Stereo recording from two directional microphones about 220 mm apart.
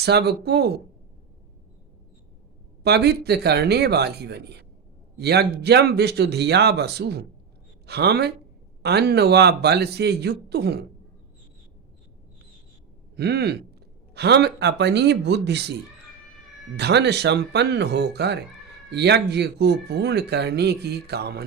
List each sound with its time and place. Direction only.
0.0 s speech: 50° right (ahead or behind)
2.8 s speech: 50° right (ahead or behind)
13.1 s speech: 50° right (ahead or behind)
16.7 s speech: 50° right (ahead or behind)